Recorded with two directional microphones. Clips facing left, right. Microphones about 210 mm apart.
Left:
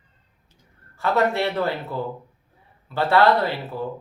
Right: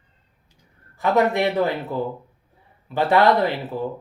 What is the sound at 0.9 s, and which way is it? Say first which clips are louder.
Speech: right 2 dB; 15° right (ahead or behind).